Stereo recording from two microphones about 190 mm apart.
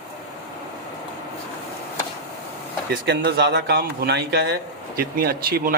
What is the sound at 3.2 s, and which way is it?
A man's voice, 55° right (ahead or behind).